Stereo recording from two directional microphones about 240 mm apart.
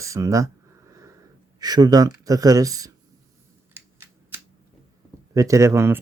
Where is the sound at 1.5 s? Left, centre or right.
Centre.